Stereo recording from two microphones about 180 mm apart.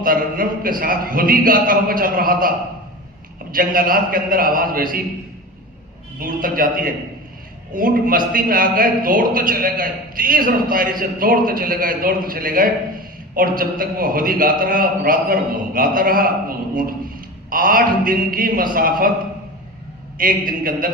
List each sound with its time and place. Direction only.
0.0 s a man's voice: 50° right (ahead or behind)
3.5 s a man's voice: 50° right (ahead or behind)
6.1 s a man's voice: 50° right (ahead or behind)
20.1 s a man's voice: 50° right (ahead or behind)